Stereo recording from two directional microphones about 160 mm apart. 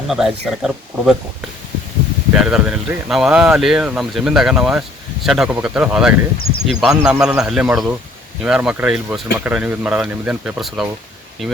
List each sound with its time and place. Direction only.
0.1 s speech: 5° right (ahead or behind)
2.3 s speech: 5° right (ahead or behind)
6.3 s speech: 65° left (ahead or behind)
6.7 s speech: 5° right (ahead or behind)